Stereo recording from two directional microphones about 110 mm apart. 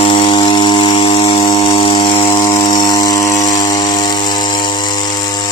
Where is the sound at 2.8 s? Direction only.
35° left (ahead or behind).